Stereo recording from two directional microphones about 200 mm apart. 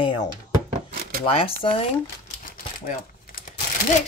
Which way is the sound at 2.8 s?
45° left (ahead or behind).